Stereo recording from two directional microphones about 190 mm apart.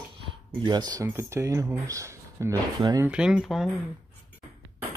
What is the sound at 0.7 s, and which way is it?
Speech, 20° right (ahead or behind).